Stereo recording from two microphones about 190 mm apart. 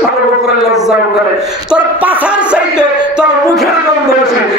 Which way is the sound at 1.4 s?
5° right (ahead or behind).